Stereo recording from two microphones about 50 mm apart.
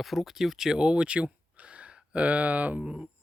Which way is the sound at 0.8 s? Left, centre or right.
Right.